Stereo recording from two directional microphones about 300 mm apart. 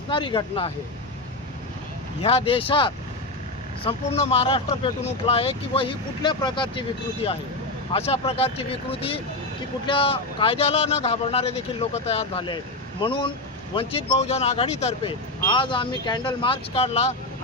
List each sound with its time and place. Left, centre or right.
0.1 s speech: centre
2.2 s speech: centre